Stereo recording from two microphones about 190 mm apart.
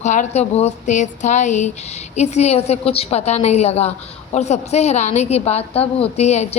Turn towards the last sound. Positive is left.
turn(degrees=35)  # may be behind; listen again after turning